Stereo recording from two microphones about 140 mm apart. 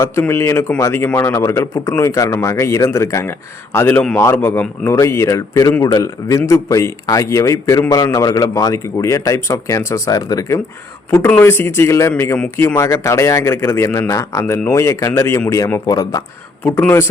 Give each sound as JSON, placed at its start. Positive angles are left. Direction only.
{"t": 0.0, "sound": "a man's voice", "side_deg": 20}
{"t": 11.1, "sound": "a man's voice", "side_deg": 15}
{"t": 16.6, "sound": "speech", "side_deg": 15}